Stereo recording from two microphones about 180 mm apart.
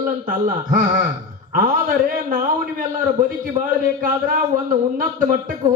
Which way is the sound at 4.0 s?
50° right (ahead or behind).